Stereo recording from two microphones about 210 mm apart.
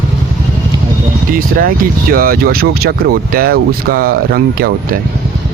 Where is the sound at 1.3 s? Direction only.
45° right (ahead or behind).